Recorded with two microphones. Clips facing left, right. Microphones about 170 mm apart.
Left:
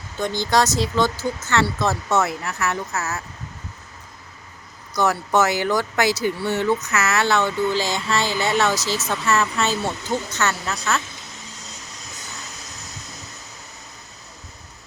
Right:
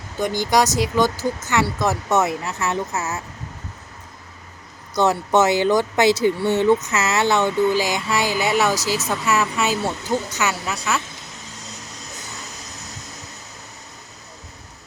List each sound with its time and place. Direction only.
0.2 s speech: 15° right (ahead or behind)
4.9 s speech: 20° right (ahead or behind)